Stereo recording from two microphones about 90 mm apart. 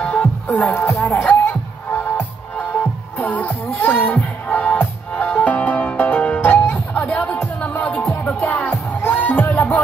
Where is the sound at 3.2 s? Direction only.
20° left (ahead or behind).